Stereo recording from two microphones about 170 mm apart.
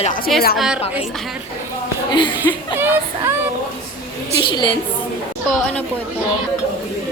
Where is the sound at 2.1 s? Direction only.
25° left (ahead or behind).